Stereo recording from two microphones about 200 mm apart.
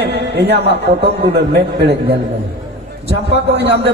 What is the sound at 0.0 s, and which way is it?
A man's voice, 55° right (ahead or behind).